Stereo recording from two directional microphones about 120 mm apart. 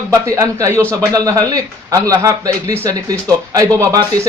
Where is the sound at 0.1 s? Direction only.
25° right (ahead or behind).